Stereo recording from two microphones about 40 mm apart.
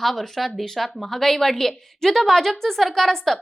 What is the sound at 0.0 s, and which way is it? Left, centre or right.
A woman's voice, centre.